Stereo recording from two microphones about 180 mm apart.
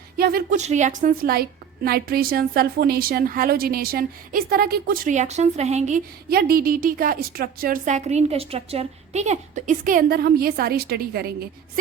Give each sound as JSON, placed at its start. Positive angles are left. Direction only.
{"t": 0.2, "sound": "a woman's voice", "side_deg": -55}
{"t": 0.6, "sound": "a woman's voice", "side_deg": -40}
{"t": 6.3, "sound": "a woman's voice", "side_deg": -55}